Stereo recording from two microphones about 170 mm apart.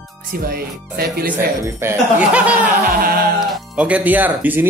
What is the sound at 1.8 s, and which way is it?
Speech, 5° right (ahead or behind).